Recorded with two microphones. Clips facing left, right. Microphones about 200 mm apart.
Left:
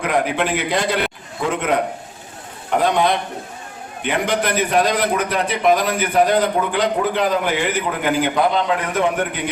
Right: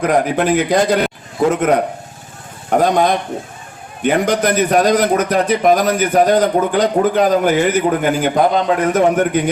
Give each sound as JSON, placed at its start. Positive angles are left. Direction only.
{"t": 0.0, "sound": "a man's voice", "side_deg": -40}